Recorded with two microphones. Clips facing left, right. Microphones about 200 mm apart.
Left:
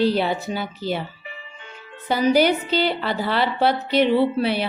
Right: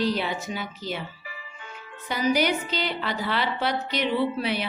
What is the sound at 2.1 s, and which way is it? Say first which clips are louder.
A woman's voice: left 6 dB; 30° left (ahead or behind).